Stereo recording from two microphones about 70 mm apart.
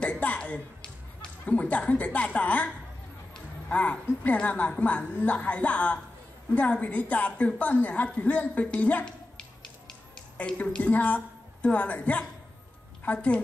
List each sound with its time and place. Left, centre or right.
0.0 s music: left
1.4 s a woman's voice: centre
10.3 s a woman's voice: centre